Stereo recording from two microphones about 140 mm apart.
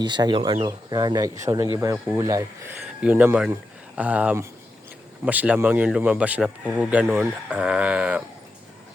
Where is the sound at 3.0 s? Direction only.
10° right (ahead or behind).